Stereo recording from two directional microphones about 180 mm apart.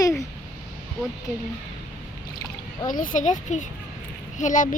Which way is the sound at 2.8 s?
50° left (ahead or behind).